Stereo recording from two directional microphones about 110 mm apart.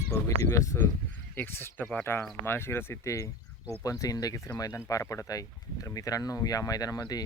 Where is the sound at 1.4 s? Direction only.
15° left (ahead or behind).